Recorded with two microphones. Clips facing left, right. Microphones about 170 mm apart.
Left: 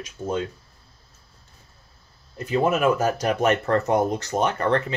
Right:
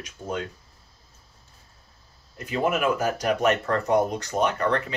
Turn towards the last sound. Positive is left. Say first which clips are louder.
# left 2 dB
turn(degrees=25)  # may be behind; listen again after turning